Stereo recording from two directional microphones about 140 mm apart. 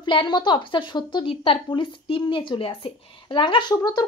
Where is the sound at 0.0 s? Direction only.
35° left (ahead or behind).